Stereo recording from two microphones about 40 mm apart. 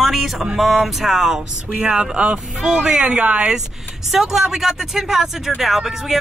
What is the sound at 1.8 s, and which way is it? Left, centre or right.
Speech, centre.